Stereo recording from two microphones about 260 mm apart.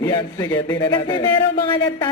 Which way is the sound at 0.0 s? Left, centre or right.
Centre.